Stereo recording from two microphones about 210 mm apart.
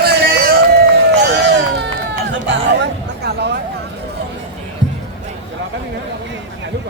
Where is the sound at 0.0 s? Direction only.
50° right (ahead or behind).